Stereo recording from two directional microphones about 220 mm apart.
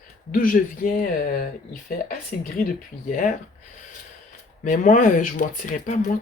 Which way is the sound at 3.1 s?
35° left (ahead or behind).